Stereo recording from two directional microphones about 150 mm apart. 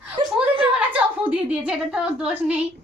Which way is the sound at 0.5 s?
35° right (ahead or behind).